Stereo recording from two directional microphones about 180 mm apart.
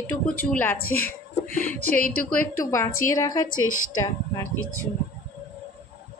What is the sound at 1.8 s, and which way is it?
Speech, 50° left (ahead or behind).